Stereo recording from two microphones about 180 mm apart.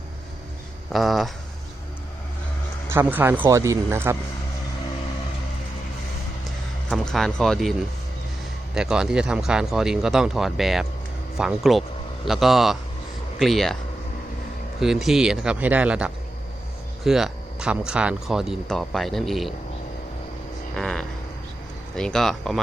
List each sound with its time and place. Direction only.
0.9 s speech: centre (ahead or behind)
2.9 s a man's voice: 10° right (ahead or behind)
6.9 s speech: centre (ahead or behind)
14.8 s speech: centre (ahead or behind)
20.7 s a sound: 5° left (ahead or behind)
21.9 s speech: 5° left (ahead or behind)